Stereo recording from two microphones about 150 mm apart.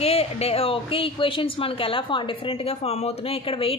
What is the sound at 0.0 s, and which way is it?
A woman's voice, 40° left (ahead or behind).